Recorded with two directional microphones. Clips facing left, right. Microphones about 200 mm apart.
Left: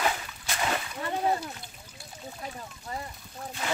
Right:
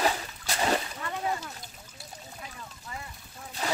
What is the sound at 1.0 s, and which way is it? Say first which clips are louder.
Speech: left 4 dB; 35° left (ahead or behind).